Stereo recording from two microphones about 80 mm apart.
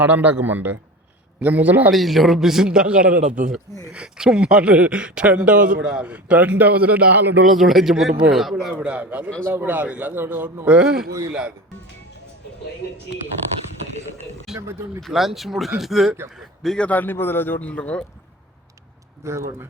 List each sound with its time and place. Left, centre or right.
0.0 s a man's voice: centre
1.9 s a man's voice: centre; by 7.3 s right
7.4 s a man's voice: centre
8.8 s a man's voice: centre
10.7 s speech: centre
13.4 s a man's voice: left
14.5 s a man's voice: centre
16.6 s a man's voice: centre
19.2 s speech: right